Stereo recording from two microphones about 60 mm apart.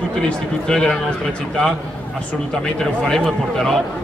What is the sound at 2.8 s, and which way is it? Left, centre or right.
Speech, centre.